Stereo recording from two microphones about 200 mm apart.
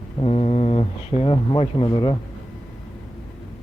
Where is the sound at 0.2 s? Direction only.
30° left (ahead or behind).